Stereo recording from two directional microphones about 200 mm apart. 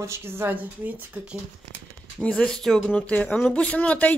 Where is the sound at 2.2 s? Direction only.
5° left (ahead or behind).